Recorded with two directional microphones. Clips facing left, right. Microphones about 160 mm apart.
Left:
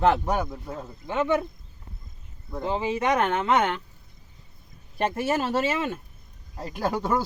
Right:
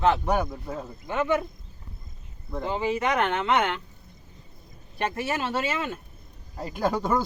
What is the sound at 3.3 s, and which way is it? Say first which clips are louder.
Speech: left 1 dB; 45° left (ahead or behind).